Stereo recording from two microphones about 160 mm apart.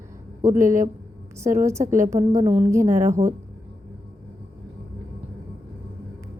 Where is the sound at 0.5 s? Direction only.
20° right (ahead or behind).